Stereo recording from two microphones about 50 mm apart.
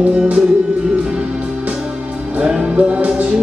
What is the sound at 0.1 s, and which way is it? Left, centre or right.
Music, centre.